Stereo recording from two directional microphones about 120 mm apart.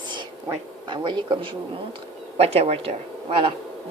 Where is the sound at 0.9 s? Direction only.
40° right (ahead or behind).